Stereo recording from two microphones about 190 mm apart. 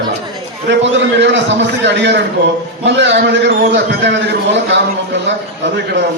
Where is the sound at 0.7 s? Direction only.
70° right (ahead or behind).